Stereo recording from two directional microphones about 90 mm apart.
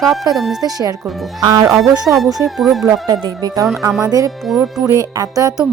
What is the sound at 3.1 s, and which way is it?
Speech, 45° right (ahead or behind).